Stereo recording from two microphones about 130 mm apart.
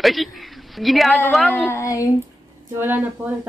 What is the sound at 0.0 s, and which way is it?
A woman's voice, centre (ahead or behind).